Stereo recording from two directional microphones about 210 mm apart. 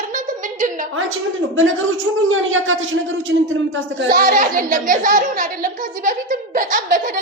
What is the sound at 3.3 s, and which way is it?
Speech, 60° right (ahead or behind).